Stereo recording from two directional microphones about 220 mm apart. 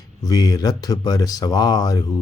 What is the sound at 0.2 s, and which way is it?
Speech, 15° left (ahead or behind).